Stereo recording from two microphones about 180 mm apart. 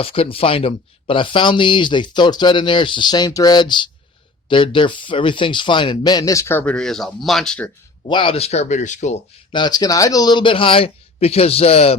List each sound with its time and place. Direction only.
0.0 s speech: 30° left (ahead or behind); by 7.7 s 5° left (ahead or behind)
8.0 s speech: 30° left (ahead or behind)
9.5 s speech: 25° left (ahead or behind)